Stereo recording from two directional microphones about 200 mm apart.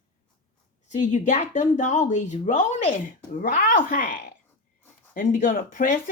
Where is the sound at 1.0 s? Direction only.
40° left (ahead or behind).